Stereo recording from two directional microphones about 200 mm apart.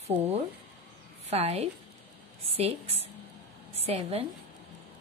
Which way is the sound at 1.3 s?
30° right (ahead or behind).